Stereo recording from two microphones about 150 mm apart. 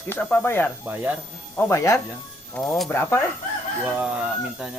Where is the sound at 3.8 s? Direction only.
10° right (ahead or behind).